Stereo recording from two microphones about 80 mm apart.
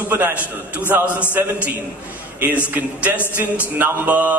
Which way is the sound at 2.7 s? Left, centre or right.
Centre.